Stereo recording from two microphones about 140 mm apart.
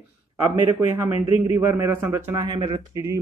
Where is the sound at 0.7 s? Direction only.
15° right (ahead or behind).